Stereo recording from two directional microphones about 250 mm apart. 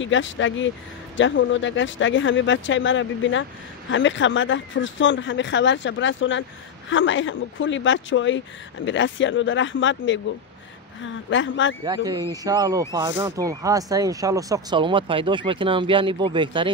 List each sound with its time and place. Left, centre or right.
0.0 s speech: left
11.2 s speech: left
11.8 s speech: centre